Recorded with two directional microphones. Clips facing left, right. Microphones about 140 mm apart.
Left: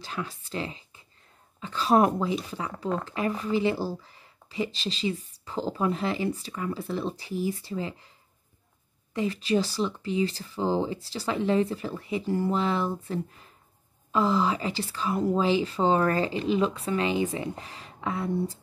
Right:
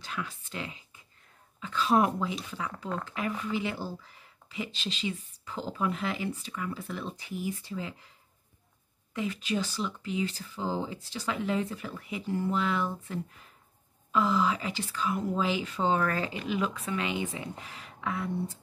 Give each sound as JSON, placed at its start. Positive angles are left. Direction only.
{"t": 0.0, "sound": "a woman's voice", "side_deg": 35}
{"t": 9.1, "sound": "speech", "side_deg": 35}